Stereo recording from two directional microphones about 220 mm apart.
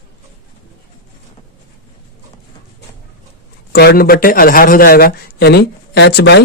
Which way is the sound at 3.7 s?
45° left (ahead or behind).